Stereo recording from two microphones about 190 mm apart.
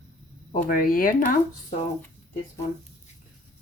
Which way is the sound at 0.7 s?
50° left (ahead or behind).